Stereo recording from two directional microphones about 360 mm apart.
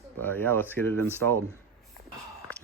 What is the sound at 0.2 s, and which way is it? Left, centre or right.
Speech, centre.